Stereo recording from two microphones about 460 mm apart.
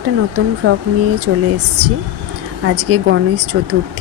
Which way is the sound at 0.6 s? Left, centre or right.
Right.